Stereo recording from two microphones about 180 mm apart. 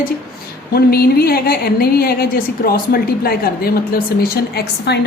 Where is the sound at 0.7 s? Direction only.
60° left (ahead or behind).